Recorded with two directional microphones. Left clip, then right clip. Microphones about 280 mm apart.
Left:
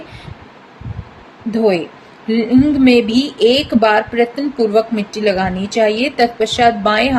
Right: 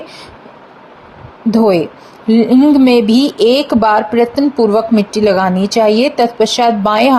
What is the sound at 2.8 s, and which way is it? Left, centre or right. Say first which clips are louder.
Speech: right 2 dB; right.